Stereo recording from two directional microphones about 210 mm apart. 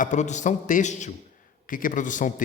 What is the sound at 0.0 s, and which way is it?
A man's voice, 35° left (ahead or behind).